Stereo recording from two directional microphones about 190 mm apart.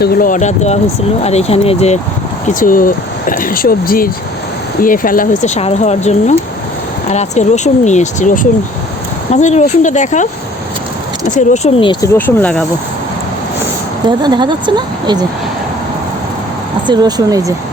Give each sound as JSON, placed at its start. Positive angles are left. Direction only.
{"t": 0.0, "sound": "speech", "side_deg": 45}
{"t": 2.5, "sound": "speech", "side_deg": 45}
{"t": 11.3, "sound": "speech", "side_deg": 35}
{"t": 12.0, "sound": "speech", "side_deg": 10}
{"t": 14.2, "sound": "speech", "side_deg": -25}
{"t": 16.8, "sound": "speech", "side_deg": -20}